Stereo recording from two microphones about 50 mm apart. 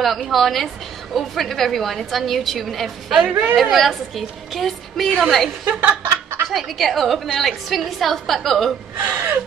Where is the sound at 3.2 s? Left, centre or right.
Right.